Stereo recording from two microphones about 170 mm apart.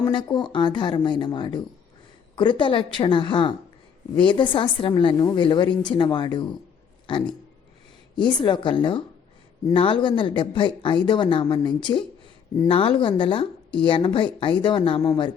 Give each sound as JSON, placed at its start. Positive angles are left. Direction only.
{"t": 0.0, "sound": "a woman's voice", "side_deg": 25}
{"t": 8.1, "sound": "a woman's voice", "side_deg": 25}